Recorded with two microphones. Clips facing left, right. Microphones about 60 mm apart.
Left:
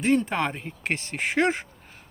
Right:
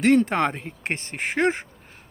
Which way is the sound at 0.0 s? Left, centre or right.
Right.